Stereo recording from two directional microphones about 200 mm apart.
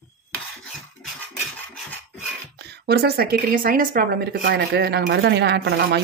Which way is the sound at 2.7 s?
55° right (ahead or behind).